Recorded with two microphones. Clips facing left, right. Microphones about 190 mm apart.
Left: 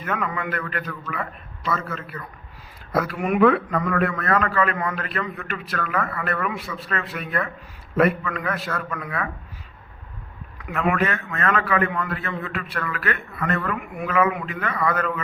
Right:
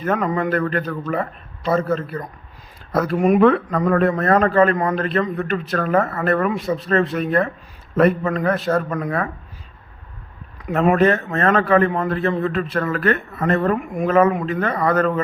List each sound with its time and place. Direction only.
0.0 s a man's voice: 35° right (ahead or behind)
10.6 s a man's voice: 35° right (ahead or behind)